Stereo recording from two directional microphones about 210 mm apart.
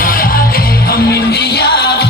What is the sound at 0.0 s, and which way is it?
Music, 40° left (ahead or behind).